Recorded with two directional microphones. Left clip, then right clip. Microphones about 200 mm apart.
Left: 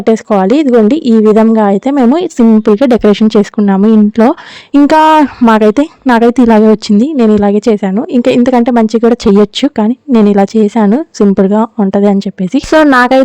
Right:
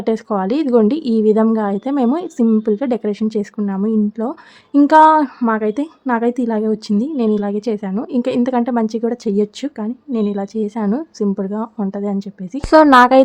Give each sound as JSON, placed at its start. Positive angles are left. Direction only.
{"t": 0.0, "sound": "a woman's voice", "side_deg": 35}
{"t": 12.7, "sound": "speech", "side_deg": 30}